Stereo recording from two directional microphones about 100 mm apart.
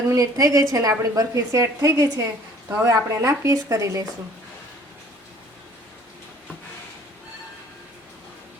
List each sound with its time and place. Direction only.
0.1 s a woman's voice: 35° right (ahead or behind)